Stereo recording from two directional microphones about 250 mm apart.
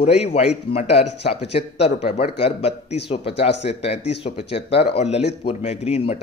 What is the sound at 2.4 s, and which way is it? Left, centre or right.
Speech, left.